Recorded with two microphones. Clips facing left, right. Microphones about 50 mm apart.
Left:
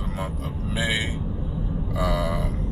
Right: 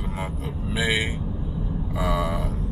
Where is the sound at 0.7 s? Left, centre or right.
Right.